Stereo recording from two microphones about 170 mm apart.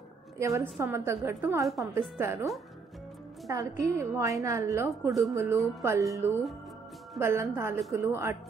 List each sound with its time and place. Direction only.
0.4 s a woman's voice: 15° right (ahead or behind)